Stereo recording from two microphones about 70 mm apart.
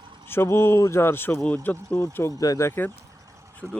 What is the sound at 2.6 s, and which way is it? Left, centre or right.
Speech, left.